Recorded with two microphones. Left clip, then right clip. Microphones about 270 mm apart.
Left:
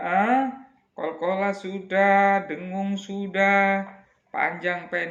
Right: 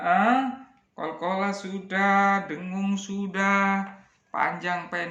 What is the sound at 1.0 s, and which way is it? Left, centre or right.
Speech, right.